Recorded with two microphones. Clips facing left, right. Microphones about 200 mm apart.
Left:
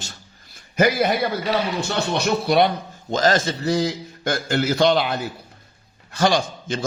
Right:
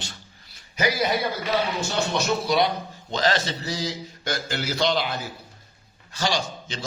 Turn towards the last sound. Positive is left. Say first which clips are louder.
# left 6 dB
turn(degrees=50)  # may be behind; listen again after turning